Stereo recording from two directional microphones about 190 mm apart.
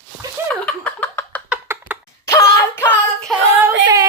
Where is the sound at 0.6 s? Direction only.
10° left (ahead or behind).